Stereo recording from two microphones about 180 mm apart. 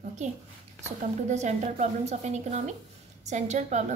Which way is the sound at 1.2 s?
40° right (ahead or behind).